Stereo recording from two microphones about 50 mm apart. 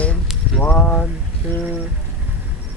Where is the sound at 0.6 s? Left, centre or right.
Left.